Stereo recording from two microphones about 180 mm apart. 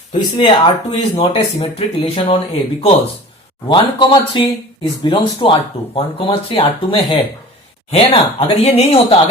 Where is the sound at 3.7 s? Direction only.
25° left (ahead or behind).